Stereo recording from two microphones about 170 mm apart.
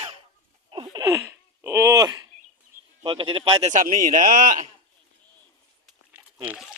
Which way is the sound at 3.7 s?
50° right (ahead or behind).